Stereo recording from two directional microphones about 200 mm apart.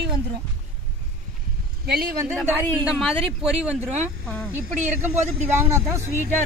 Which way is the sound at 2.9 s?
Centre (ahead or behind).